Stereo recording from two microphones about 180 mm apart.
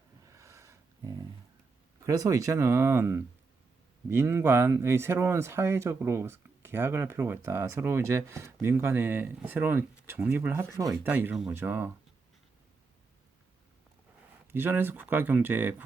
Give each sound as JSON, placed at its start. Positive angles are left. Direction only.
{"t": 0.3, "sound": "a sound", "side_deg": -15}
{"t": 2.0, "sound": "speech", "side_deg": -20}
{"t": 14.5, "sound": "speech", "side_deg": -10}